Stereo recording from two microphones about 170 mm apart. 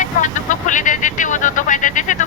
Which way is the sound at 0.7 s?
50° left (ahead or behind).